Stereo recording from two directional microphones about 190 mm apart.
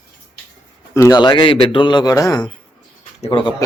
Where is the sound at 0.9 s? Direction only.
20° left (ahead or behind).